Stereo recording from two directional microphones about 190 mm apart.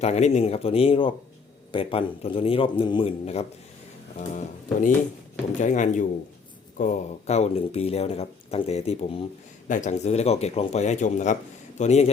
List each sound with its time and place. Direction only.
0.0 s speech: 35° left (ahead or behind)
9.6 s speech: 40° left (ahead or behind)